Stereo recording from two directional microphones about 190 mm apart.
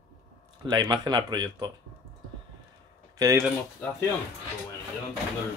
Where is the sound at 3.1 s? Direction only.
15° right (ahead or behind).